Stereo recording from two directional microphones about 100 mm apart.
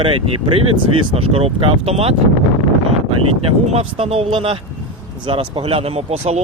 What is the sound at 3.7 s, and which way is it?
Speech, 85° right.